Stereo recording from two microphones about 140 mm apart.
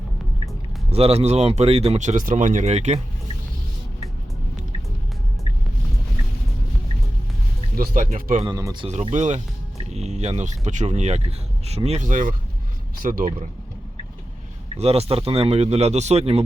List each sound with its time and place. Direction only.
0.9 s speech: 45° right (ahead or behind)
7.8 s speech: 70° right (ahead or behind)
8.4 s speech: 30° right (ahead or behind)
8.9 s speech: 55° right (ahead or behind); by 13.5 s 70° right (ahead or behind)
14.8 s speech: 45° right (ahead or behind)